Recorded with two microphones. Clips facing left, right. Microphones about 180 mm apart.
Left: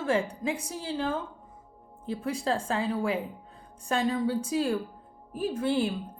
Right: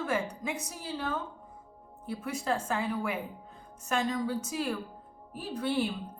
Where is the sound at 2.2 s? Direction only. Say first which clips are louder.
Left 3 dB; 30° left (ahead or behind).